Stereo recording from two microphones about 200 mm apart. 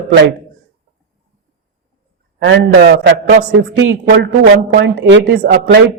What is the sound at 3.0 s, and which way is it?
A woman's voice, 60° right (ahead or behind).